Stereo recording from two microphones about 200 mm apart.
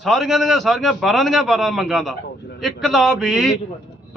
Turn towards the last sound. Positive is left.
turn(degrees=0)  # may be behind; listen again after turning